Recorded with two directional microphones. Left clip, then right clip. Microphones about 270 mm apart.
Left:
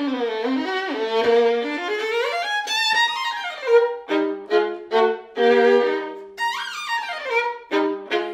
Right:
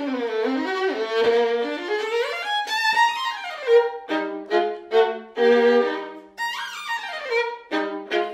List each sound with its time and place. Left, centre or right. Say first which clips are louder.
0.0 s music: left 1 dB; left
1.1 s violin: left 3 dB; left
6.5 s music: left 3 dB; left